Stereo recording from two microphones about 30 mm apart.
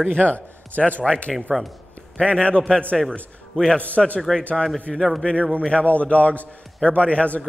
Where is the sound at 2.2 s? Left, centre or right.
Left.